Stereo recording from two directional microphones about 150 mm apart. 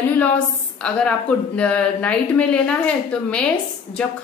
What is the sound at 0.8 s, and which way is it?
A woman's voice, 5° left (ahead or behind).